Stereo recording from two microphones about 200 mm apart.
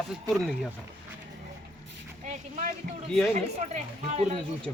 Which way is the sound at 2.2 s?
40° right (ahead or behind).